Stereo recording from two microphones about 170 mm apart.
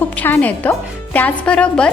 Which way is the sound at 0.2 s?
10° left (ahead or behind).